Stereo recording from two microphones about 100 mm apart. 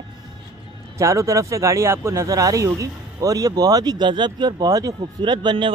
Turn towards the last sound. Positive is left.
turn(degrees=-50)  # may be behind; listen again after turning